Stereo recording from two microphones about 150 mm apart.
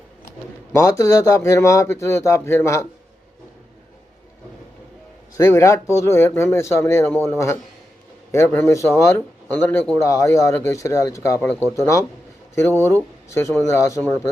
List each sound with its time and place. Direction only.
0.7 s speech: 20° left (ahead or behind)
5.4 s speech: 20° left (ahead or behind)
10.0 s speech: 20° left (ahead or behind)
12.5 s speech: 15° left (ahead or behind)